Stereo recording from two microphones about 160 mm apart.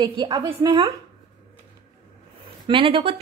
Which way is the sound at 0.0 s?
30° right (ahead or behind).